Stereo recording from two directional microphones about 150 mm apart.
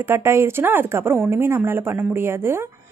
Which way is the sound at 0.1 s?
15° right (ahead or behind).